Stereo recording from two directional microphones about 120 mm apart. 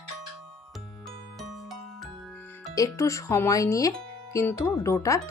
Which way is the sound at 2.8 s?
25° left (ahead or behind).